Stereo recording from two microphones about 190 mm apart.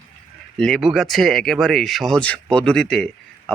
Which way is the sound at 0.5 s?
Centre (ahead or behind).